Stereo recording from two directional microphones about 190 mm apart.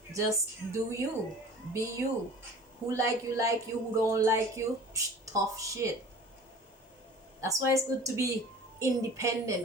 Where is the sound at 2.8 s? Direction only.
15° right (ahead or behind).